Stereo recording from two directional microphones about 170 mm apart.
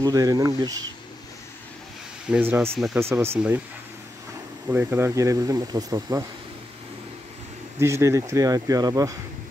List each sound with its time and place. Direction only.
0.0 s speech: 20° right (ahead or behind)
2.3 s speech: 10° right (ahead or behind)
4.6 s speech: 10° right (ahead or behind)
7.8 s speech: 15° right (ahead or behind)